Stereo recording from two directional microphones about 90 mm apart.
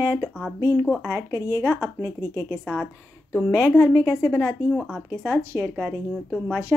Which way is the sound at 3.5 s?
30° left (ahead or behind).